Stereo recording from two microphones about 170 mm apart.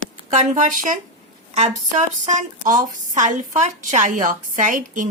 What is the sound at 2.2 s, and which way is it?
A woman's voice, 45° right (ahead or behind).